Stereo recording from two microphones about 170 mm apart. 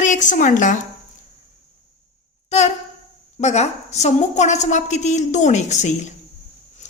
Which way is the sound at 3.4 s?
40° left (ahead or behind).